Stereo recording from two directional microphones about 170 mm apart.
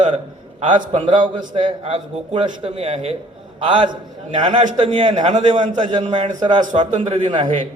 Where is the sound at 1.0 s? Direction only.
30° right (ahead or behind); by 5.9 s 45° right (ahead or behind).